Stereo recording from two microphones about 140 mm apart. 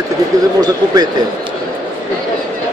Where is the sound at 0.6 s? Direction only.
30° right (ahead or behind).